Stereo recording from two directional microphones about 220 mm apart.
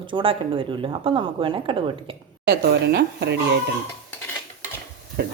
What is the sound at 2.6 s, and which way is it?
Speech, 50° right (ahead or behind).